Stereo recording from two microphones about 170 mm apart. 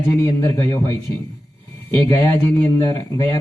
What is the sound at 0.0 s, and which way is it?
Speech, 15° left (ahead or behind).